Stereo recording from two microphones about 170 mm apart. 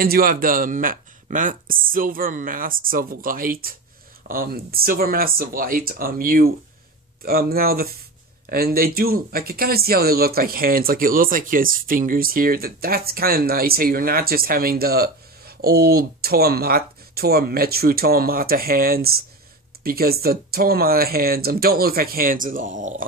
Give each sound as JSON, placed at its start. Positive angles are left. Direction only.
{"t": 0.0, "sound": "speech", "side_deg": -60}